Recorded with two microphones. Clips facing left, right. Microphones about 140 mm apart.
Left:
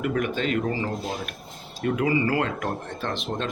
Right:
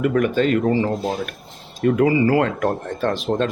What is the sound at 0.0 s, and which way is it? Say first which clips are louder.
Speech: right 7 dB; 50° right (ahead or behind).